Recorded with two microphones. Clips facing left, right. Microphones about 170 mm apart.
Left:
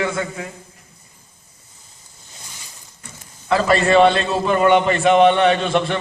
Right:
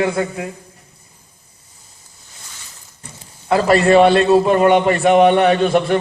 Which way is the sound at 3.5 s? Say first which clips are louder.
Right 3 dB; 35° right (ahead or behind).